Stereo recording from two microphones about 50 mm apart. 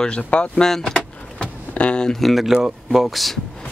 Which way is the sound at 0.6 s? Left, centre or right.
Centre.